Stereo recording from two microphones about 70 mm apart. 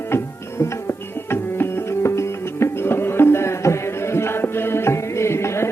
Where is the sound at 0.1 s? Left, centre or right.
Left.